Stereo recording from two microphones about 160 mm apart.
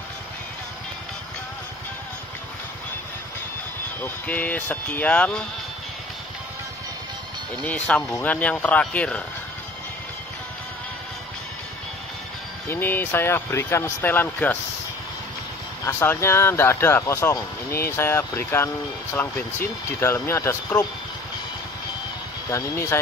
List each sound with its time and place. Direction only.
4.0 s speech: 10° left (ahead or behind)
7.6 s speech: 10° left (ahead or behind)
12.6 s speech: 15° left (ahead or behind)
15.8 s speech: 15° left (ahead or behind)
20.0 s speech: 15° left (ahead or behind)
22.5 s speech: 15° left (ahead or behind)